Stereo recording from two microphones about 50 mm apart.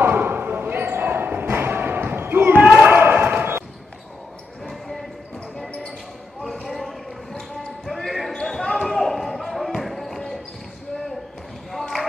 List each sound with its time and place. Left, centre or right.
0.0 s basketball bounce: right
4.6 s basketball bounce: centre
6.4 s basketball bounce: centre